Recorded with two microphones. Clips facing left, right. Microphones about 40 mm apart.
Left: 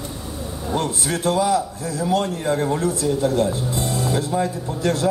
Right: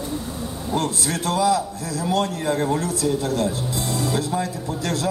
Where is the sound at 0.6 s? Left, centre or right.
Left.